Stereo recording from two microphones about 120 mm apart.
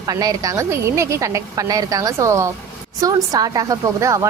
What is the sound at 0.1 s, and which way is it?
A woman's voice, 30° right (ahead or behind).